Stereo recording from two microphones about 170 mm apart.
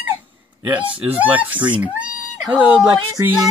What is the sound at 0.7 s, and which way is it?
Speech, 10° right (ahead or behind).